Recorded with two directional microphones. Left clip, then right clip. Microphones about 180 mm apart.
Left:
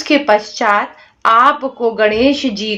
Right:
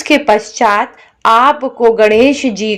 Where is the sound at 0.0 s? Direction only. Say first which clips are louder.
Right 2 dB; 30° right (ahead or behind).